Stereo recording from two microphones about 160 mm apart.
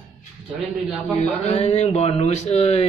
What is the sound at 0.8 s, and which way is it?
Speech, centre (ahead or behind).